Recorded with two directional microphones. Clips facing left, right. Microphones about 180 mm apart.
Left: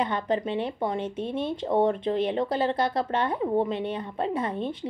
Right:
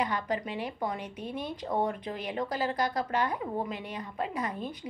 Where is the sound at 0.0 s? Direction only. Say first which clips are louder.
Left 5 dB; 25° left (ahead or behind).